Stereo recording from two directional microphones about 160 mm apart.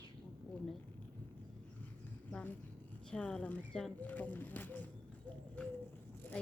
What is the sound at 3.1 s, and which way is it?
Speech, 5° left (ahead or behind).